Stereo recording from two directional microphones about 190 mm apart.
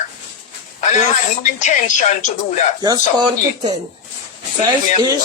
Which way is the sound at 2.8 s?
20° right (ahead or behind).